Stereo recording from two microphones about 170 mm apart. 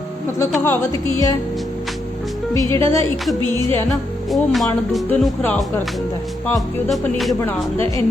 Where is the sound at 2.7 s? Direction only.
15° left (ahead or behind).